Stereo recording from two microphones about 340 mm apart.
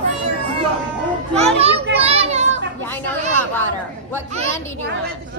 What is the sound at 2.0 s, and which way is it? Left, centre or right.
Children playing, centre.